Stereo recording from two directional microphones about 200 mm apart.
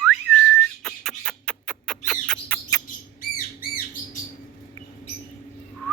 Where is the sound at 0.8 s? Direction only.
Centre (ahead or behind).